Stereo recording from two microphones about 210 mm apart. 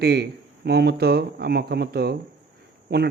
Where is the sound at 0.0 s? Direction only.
50° right (ahead or behind).